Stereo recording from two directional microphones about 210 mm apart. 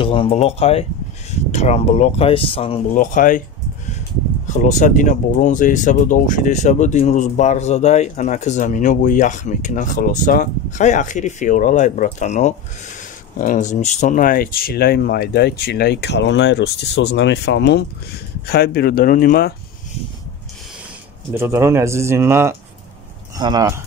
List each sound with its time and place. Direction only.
0.0 s speech: 25° left (ahead or behind)
2.9 s speech: 40° left (ahead or behind)
4.6 s speech: 35° left (ahead or behind)
21.3 s speech: 10° right (ahead or behind)